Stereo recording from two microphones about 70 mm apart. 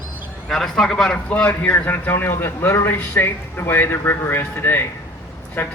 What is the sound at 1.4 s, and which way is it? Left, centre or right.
A man's voice, left.